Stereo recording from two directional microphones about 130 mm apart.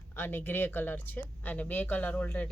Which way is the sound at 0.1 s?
15° left (ahead or behind).